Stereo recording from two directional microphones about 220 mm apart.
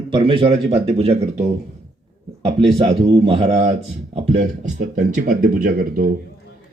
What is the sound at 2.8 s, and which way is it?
A man's voice, 25° right (ahead or behind).